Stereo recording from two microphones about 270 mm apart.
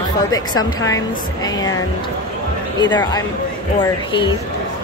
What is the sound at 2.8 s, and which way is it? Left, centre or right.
Speech, centre.